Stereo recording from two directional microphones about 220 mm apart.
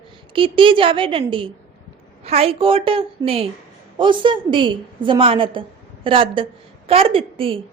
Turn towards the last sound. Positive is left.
turn(degrees=-25)  # may be behind; listen again after turning